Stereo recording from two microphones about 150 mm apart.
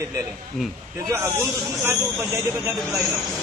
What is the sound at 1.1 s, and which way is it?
A man's voice, 15° right (ahead or behind).